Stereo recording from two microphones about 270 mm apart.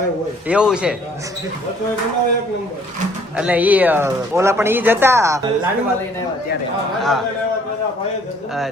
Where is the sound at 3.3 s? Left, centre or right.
Centre.